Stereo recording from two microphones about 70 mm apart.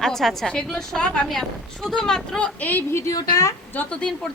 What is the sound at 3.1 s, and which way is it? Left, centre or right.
Speech, left.